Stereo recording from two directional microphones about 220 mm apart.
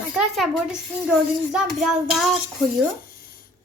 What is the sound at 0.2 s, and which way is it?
Speech, centre (ahead or behind).